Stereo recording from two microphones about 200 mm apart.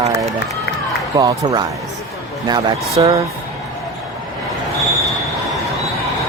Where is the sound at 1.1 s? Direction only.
20° right (ahead or behind).